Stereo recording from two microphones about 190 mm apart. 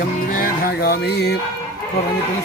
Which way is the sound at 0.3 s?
50° left (ahead or behind).